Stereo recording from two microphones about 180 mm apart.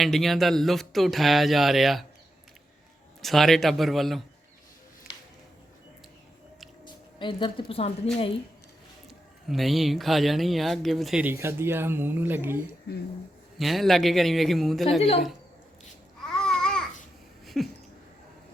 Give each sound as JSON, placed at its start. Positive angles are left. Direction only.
{"t": 0.0, "sound": "a man's voice", "side_deg": 0}
{"t": 3.2, "sound": "a man's voice", "side_deg": 0}
{"t": 6.8, "sound": "a woman's voice", "side_deg": 25}
{"t": 9.0, "sound": "a man's voice", "side_deg": 0}
{"t": 13.6, "sound": "a man's voice", "side_deg": 0}
{"t": 16.2, "sound": "babbling", "side_deg": 5}
{"t": 17.4, "sound": "a sound", "side_deg": 0}